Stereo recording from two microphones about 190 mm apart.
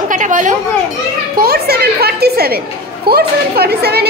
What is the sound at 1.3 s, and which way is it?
A child's voice, 55° right (ahead or behind).